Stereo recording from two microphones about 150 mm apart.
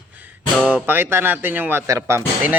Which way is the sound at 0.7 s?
10° right (ahead or behind).